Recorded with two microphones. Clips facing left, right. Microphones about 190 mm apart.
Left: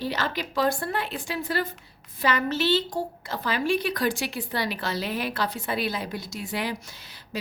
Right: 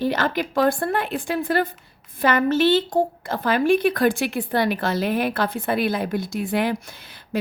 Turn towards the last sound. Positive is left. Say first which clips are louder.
# right 8 dB
turn(degrees=-55)  # may be behind; listen again after turning